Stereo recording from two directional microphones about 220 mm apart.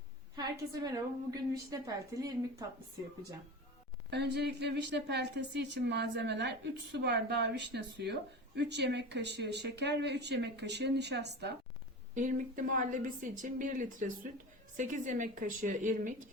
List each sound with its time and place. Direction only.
0.3 s a woman's voice: 15° right (ahead or behind)
4.1 s a woman's voice: 50° right (ahead or behind)
12.1 s speech: 35° right (ahead or behind)